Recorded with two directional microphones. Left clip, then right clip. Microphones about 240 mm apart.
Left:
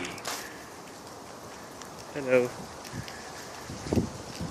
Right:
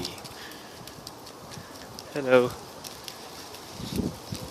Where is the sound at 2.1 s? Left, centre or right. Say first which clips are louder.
Right 4 dB; right.